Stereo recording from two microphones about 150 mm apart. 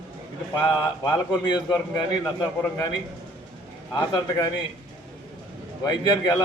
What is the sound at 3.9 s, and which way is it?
Speech, 30° left (ahead or behind).